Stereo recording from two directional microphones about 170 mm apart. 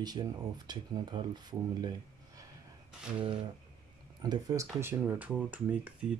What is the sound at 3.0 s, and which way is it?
Speech, 5° right (ahead or behind).